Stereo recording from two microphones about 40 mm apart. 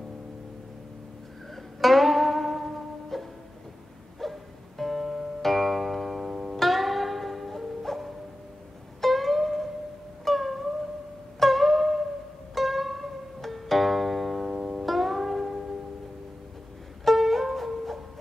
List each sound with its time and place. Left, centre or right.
1.8 s music: centre
14.5 s music: centre
14.9 s music: centre
17.0 s music: centre